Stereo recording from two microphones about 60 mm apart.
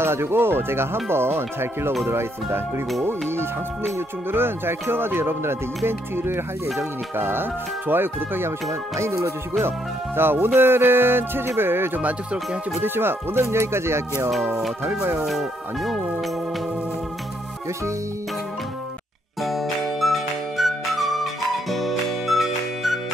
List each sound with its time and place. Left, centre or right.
0.0 s speech: right
8.9 s speech: right
9.6 s speech: right
12.0 s speech: right
12.8 s speech: right
15.2 s speech: centre
19.4 s music: centre